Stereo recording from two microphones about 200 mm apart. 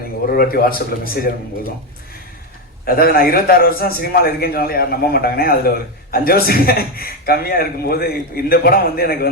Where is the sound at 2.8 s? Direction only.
50° left (ahead or behind).